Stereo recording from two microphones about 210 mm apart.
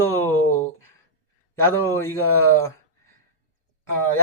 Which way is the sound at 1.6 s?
10° left (ahead or behind).